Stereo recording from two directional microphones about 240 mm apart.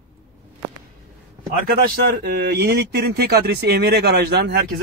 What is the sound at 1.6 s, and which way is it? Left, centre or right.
Speech, right.